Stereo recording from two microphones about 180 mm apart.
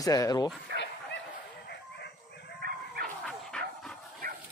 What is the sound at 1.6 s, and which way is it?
Bow-wow, 70° left (ahead or behind).